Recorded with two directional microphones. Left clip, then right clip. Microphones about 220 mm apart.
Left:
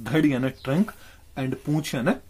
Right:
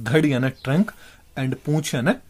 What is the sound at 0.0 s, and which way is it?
Speech, 35° right (ahead or behind).